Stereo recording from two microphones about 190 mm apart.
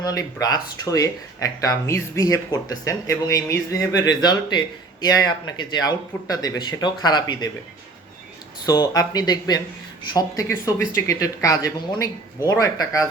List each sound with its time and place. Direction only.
0.0 s speech: 20° left (ahead or behind)
8.6 s speech: 20° left (ahead or behind)